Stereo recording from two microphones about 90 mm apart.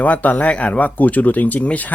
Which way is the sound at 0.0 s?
15° left (ahead or behind).